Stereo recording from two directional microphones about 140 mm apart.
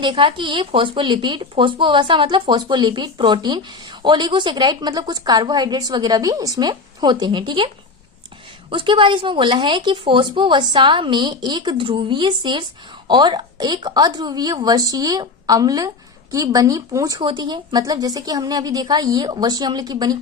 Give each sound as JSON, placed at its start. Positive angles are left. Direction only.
{"t": 0.0, "sound": "speech", "side_deg": -35}
{"t": 8.7, "sound": "a woman's voice", "side_deg": -35}